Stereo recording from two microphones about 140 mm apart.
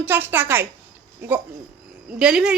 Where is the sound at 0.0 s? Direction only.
15° right (ahead or behind).